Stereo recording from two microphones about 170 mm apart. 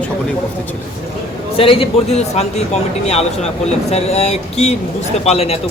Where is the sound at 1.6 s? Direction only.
35° left (ahead or behind).